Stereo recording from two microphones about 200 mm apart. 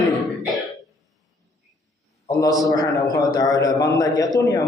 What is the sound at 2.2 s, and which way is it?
A man's voice, 20° left (ahead or behind).